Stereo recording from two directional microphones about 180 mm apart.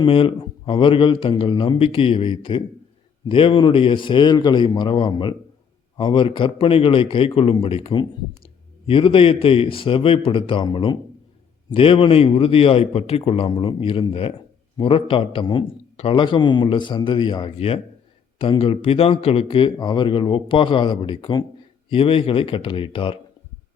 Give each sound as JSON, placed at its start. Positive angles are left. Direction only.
{"t": 0.0, "sound": "a man's voice", "side_deg": 25}